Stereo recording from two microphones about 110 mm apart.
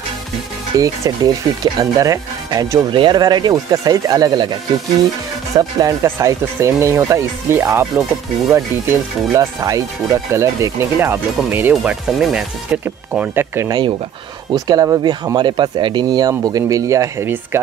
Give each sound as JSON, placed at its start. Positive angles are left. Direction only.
{"t": 0.7, "sound": "speech", "side_deg": -30}
{"t": 2.9, "sound": "speech", "side_deg": -45}
{"t": 5.6, "sound": "speech", "side_deg": -35}
{"t": 12.1, "sound": "speech", "side_deg": -5}
{"t": 13.1, "sound": "speech", "side_deg": -15}
{"t": 13.7, "sound": "speech", "side_deg": -40}
{"t": 15.3, "sound": "speech", "side_deg": -45}